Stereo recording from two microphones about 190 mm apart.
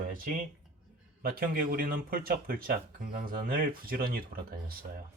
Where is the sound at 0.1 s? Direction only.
45° right (ahead or behind).